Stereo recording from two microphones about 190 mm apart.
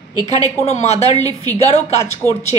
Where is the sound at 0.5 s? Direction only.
35° left (ahead or behind).